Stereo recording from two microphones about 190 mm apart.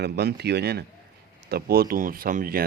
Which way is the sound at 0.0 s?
60° right (ahead or behind).